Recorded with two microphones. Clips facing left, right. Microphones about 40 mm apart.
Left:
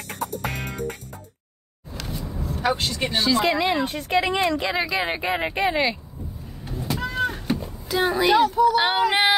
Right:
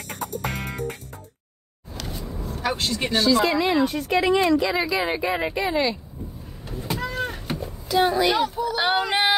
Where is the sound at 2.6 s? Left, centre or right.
Centre.